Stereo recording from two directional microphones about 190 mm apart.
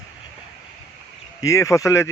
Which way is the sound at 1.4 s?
15° left (ahead or behind).